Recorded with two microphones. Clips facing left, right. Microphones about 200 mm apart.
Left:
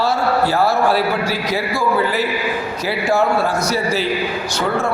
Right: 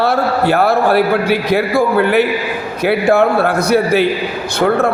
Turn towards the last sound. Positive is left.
turn(degrees=-55)  # may be behind; listen again after turning